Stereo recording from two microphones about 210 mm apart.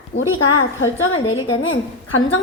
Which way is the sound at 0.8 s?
75° left (ahead or behind).